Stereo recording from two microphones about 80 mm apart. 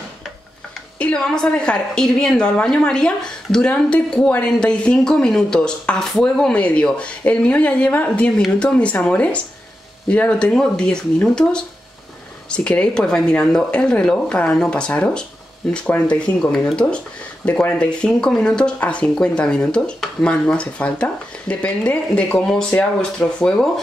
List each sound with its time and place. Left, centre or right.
0.9 s a woman's voice: centre
17.5 s a woman's voice: centre